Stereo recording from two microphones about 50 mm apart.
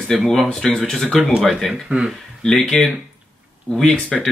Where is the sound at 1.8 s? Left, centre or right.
Centre.